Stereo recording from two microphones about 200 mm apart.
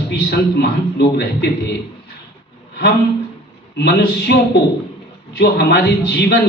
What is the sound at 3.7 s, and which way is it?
Speech, 55° left (ahead or behind).